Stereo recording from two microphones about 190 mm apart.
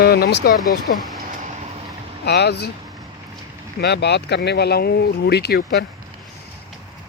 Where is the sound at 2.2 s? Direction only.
60° left (ahead or behind).